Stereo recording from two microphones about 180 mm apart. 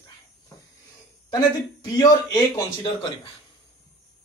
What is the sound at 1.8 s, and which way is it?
A man's voice, 20° left (ahead or behind).